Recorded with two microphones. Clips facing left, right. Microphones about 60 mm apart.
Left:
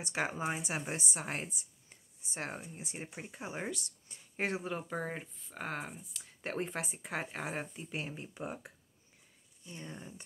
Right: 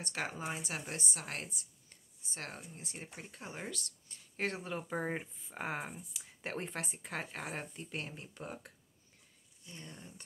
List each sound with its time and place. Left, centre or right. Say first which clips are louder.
0.0 s a woman's voice: left 4 dB; centre
4.9 s a woman's voice: right 1 dB; centre